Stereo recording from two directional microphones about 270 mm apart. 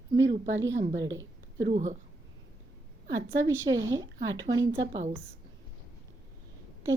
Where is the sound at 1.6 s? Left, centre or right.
Right.